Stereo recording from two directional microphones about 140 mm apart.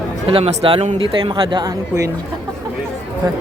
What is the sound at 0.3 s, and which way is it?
Speech, 45° right (ahead or behind).